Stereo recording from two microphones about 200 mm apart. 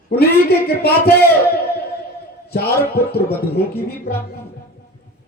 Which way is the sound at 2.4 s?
50° left (ahead or behind).